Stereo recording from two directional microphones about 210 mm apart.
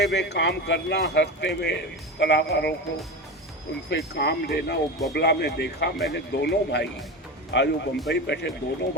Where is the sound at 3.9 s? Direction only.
55° left (ahead or behind).